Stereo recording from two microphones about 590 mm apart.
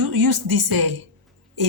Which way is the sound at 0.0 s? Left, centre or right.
Right.